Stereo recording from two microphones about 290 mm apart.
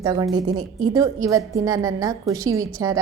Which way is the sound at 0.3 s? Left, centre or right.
Right.